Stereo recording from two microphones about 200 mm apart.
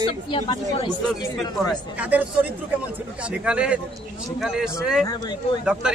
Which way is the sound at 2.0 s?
10° right (ahead or behind).